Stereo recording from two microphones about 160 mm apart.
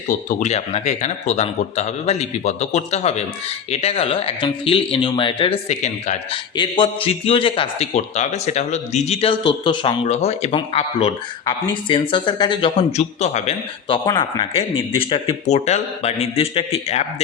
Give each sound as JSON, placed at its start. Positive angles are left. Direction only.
{"t": 0.3, "sound": "speech", "side_deg": 50}
{"t": 5.6, "sound": "speech", "side_deg": 45}
{"t": 6.6, "sound": "speech", "side_deg": 30}
{"t": 10.1, "sound": "speech", "side_deg": 40}
{"t": 14.0, "sound": "speech", "side_deg": 25}